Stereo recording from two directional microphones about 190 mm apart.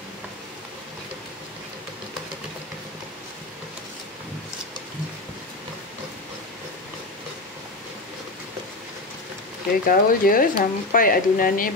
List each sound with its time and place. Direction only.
9.8 s speech: 50° left (ahead or behind)